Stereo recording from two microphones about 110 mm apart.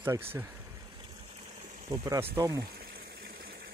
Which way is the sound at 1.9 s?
35° right (ahead or behind).